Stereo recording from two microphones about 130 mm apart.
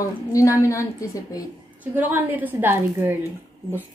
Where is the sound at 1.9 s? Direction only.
15° right (ahead or behind).